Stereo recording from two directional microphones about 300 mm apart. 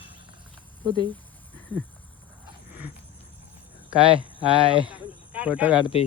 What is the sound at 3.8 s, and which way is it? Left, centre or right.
Speech, centre.